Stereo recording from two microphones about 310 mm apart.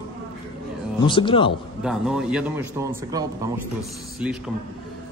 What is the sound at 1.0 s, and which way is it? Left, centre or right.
Speech, centre.